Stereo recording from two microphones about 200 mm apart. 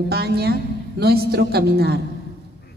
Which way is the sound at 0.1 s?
55° right (ahead or behind).